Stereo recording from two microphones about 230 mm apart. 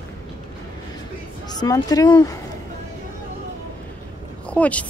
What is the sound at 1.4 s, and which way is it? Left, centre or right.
Speech, centre.